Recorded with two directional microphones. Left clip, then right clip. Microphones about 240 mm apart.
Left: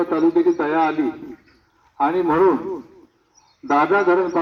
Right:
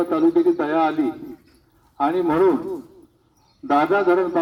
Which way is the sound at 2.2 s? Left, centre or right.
Centre.